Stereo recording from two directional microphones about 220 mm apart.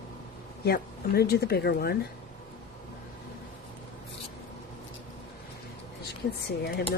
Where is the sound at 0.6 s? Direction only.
45° left (ahead or behind).